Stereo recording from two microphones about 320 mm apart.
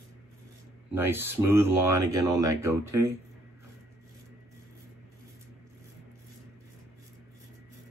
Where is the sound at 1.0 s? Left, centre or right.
Centre.